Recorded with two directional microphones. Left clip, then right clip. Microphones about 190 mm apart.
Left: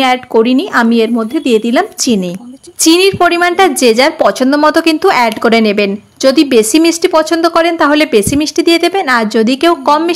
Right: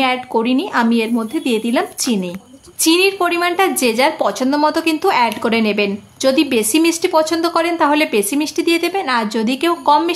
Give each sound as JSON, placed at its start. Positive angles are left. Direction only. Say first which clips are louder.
{"t": 0.0, "sound": "a woman's voice", "louder": "left 7 dB", "side_deg": 25}